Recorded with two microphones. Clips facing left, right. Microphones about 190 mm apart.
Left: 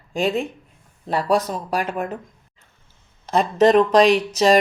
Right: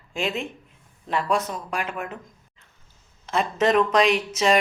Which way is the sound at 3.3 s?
35° left (ahead or behind).